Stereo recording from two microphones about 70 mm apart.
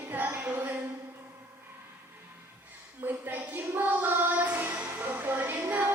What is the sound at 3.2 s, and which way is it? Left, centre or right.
Music, right.